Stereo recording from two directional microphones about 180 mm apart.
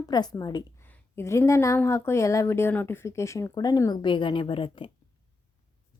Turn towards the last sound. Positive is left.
turn(degrees=30)  # may be behind; listen again after turning